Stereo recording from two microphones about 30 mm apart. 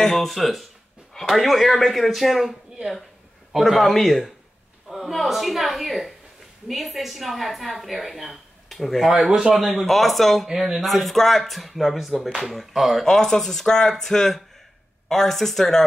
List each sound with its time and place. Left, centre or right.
0.0 s speech: centre
0.3 s a woman's voice: centre
3.5 s a woman's voice: centre
9.3 s speech: centre
9.8 s a woman's voice: centre
10.4 s speech: centre
10.8 s a woman's voice: centre
13.0 s speech: centre